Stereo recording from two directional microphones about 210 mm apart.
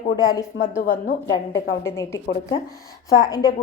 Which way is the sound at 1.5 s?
15° left (ahead or behind).